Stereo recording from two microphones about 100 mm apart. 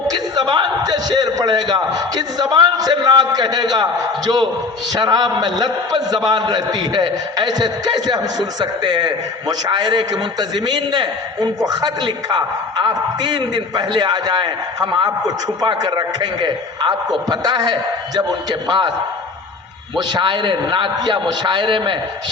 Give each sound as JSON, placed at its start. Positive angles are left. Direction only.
{"t": 0.1, "sound": "a man's voice", "side_deg": -45}
{"t": 4.9, "sound": "a man's voice", "side_deg": -40}
{"t": 20.0, "sound": "a man's voice", "side_deg": -45}